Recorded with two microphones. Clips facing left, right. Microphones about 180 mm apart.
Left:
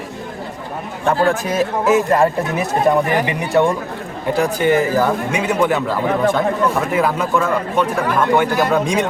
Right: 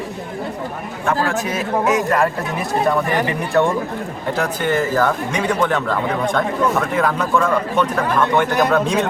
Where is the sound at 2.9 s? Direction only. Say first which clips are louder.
Left 3 dB; 15° left (ahead or behind).